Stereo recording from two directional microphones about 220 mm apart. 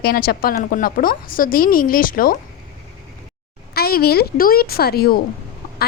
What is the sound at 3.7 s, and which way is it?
A woman's voice, 45° left (ahead or behind).